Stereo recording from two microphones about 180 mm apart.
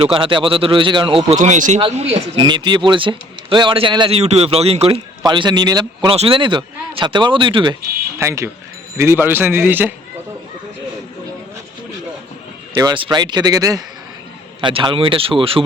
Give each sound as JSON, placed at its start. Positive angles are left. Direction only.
{"t": 0.0, "sound": "speech", "side_deg": -30}
{"t": 1.4, "sound": "speech", "side_deg": -45}
{"t": 8.2, "sound": "a man's voice", "side_deg": -15}
{"t": 12.7, "sound": "speech", "side_deg": -25}